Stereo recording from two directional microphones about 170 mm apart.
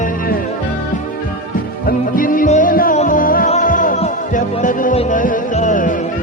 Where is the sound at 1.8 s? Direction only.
55° left (ahead or behind).